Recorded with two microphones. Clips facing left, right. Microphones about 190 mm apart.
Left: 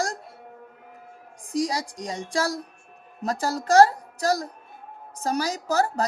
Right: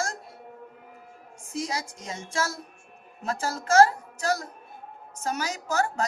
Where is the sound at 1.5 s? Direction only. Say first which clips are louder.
Left 6 dB; 35° left (ahead or behind).